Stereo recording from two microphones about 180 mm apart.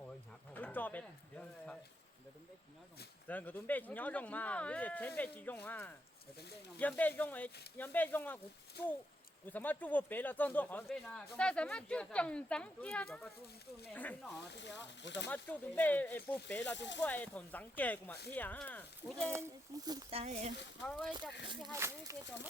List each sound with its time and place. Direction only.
0.5 s a sound: 10° left (ahead or behind)
3.2 s speech: 10° left (ahead or behind)
9.5 s speech: 10° left (ahead or behind)
14.5 s speech: 75° left (ahead or behind)
15.3 s speech: 10° left (ahead or behind)
16.7 s speech: 80° left
17.0 s speech: 10° left (ahead or behind)
19.3 s speech: 20° right (ahead or behind)
20.1 s speech: 35° right (ahead or behind)
20.8 s speech: 5° left (ahead or behind)
21.6 s speech: 15° right (ahead or behind)